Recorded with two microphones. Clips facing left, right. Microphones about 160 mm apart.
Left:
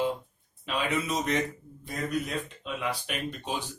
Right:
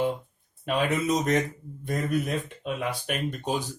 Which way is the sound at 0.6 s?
45° right (ahead or behind).